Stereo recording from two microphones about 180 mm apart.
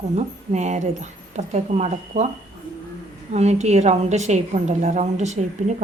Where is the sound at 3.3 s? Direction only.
40° right (ahead or behind).